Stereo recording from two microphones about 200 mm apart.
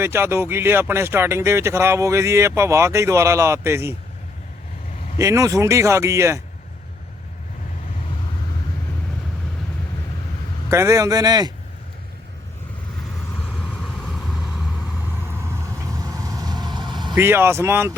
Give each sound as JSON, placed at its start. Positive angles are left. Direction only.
{"t": 0.0, "sound": "speech", "side_deg": -10}
{"t": 5.1, "sound": "speech", "side_deg": -15}
{"t": 10.7, "sound": "speech", "side_deg": -15}
{"t": 13.7, "sound": "vehicle", "side_deg": 5}
{"t": 16.0, "sound": "vehicle", "side_deg": -15}
{"t": 17.2, "sound": "speech", "side_deg": -10}